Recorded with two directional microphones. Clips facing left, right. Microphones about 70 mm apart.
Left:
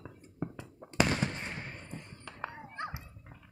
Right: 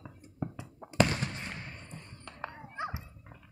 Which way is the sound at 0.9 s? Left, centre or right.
Centre.